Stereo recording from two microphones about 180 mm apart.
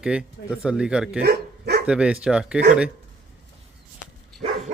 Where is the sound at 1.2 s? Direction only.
60° right (ahead or behind).